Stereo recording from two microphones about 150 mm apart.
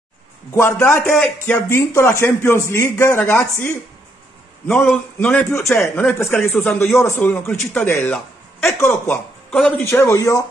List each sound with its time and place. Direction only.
0.6 s a man's voice: 15° left (ahead or behind)
1.1 s speech: 5° left (ahead or behind)
1.7 s a man's voice: 15° left (ahead or behind)
4.7 s a man's voice: 10° left (ahead or behind)